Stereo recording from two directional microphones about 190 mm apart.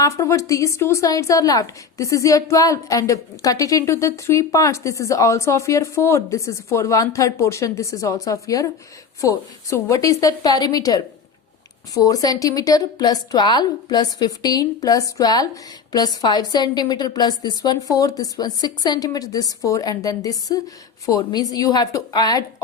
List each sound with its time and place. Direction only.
0.0 s a woman's voice: 15° left (ahead or behind)